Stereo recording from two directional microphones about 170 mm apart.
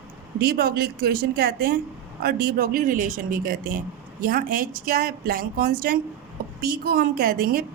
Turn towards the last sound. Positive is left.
turn(degrees=-60)  # may be behind; listen again after turning